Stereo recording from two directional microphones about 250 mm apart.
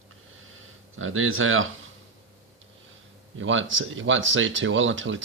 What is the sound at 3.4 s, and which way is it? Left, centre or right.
Speech, right.